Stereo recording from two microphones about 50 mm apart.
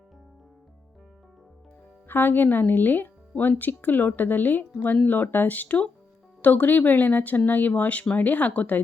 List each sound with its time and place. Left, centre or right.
2.0 s speech: left